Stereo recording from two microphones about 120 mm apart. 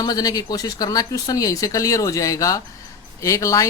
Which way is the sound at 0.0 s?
30° left (ahead or behind).